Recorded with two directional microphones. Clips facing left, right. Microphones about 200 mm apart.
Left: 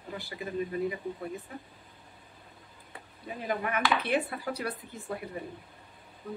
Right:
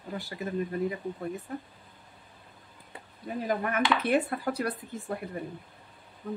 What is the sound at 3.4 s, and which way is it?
Speech, 40° right (ahead or behind).